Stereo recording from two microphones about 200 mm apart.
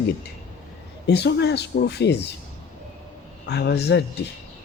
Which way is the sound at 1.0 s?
55° left (ahead or behind).